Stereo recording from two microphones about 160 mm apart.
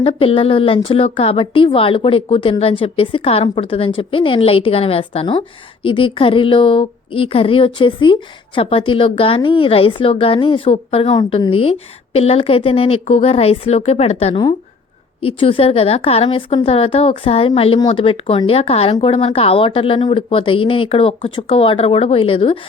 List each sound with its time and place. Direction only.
0.0 s a woman's voice: 35° left (ahead or behind)